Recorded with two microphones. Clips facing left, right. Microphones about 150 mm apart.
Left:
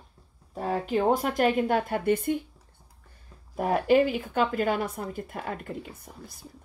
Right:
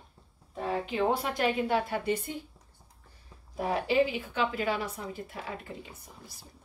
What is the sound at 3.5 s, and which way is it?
Speech, 50° left (ahead or behind).